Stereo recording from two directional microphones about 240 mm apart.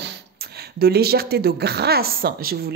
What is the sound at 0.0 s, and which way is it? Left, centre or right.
Speech, right.